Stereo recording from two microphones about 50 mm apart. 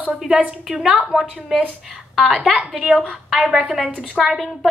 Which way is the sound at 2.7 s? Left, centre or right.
Centre.